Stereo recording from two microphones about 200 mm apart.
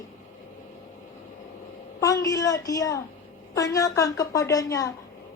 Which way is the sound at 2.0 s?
15° left (ahead or behind).